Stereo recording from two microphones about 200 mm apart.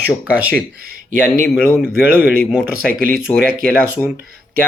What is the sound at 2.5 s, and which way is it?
Speech, 5° right (ahead or behind).